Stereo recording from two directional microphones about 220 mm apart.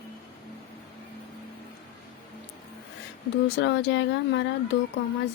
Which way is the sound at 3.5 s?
50° left (ahead or behind).